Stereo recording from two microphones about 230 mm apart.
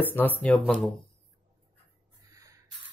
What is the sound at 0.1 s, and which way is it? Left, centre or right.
Speech, centre.